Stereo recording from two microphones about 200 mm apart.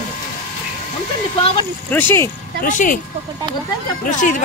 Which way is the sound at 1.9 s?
10° left (ahead or behind).